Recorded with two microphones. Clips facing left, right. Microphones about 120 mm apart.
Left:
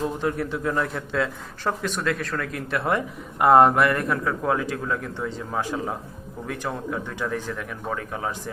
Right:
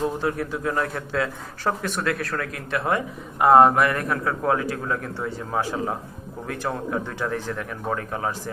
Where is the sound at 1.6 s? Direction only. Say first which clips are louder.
Right 1 dB; 15° right (ahead or behind).